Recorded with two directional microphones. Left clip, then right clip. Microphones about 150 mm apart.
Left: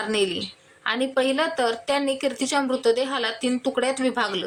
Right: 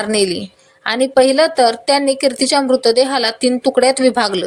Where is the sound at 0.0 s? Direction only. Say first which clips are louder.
Right 7 dB; 35° right (ahead or behind).